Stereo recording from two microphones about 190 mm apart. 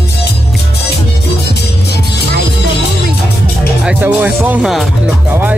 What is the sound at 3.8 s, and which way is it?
Speech, 5° right (ahead or behind).